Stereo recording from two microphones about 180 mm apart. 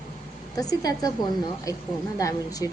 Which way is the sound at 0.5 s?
20° left (ahead or behind).